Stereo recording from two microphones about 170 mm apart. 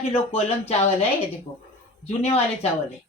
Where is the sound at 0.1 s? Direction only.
35° left (ahead or behind).